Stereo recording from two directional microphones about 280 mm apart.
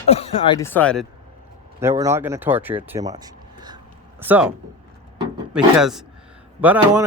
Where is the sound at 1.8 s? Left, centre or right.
Centre.